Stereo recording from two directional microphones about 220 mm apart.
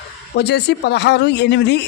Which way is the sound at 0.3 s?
50° left (ahead or behind).